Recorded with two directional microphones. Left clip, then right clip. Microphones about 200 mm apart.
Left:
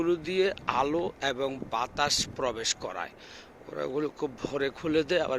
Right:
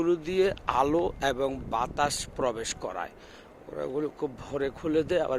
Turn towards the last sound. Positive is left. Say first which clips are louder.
# even
turn(degrees=-5)  # may be behind; listen again after turning